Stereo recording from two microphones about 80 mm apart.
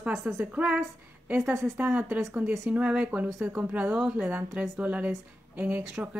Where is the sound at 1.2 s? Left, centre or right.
Right.